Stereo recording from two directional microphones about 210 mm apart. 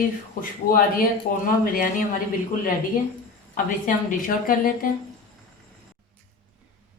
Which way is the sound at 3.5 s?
40° left (ahead or behind).